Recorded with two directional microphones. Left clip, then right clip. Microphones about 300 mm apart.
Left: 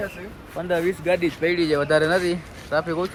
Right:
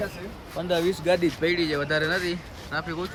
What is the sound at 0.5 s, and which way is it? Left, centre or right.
Speech, centre.